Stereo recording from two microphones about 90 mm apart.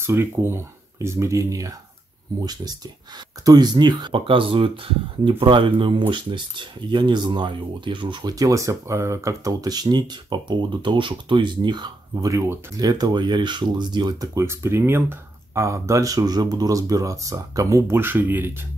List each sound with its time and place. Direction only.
0.0 s speech: 25° right (ahead or behind)
2.4 s speech: 50° right (ahead or behind)
4.1 s speech: 75° right (ahead or behind)
5.4 s speech: 70° right (ahead or behind)
12.3 s speech: 35° right (ahead or behind)
12.8 s speech: 50° right (ahead or behind)
14.4 s speech: 30° right (ahead or behind)